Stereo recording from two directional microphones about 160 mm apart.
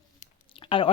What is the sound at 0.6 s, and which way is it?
Chewing, 35° left (ahead or behind).